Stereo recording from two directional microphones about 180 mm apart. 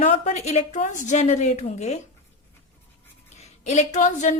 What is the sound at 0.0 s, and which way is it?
A woman's voice, 40° left (ahead or behind).